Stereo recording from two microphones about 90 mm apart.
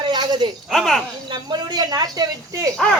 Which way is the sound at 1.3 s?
50° right (ahead or behind).